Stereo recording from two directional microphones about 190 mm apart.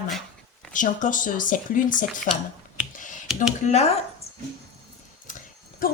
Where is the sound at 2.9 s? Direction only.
45° left (ahead or behind).